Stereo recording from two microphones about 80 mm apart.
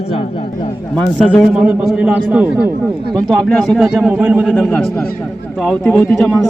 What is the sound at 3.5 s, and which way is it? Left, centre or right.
Speech, centre.